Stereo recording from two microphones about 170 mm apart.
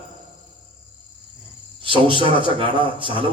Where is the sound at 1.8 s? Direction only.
30° right (ahead or behind).